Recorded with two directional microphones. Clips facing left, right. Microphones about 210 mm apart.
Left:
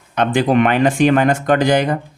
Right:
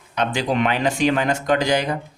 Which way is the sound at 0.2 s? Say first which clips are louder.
Left 6 dB; 55° left (ahead or behind).